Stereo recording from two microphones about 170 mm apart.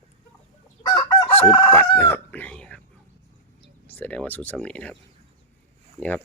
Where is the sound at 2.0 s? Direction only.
10° left (ahead or behind).